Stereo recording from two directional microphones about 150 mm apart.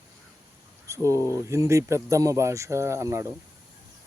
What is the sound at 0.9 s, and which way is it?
Speech, 20° right (ahead or behind).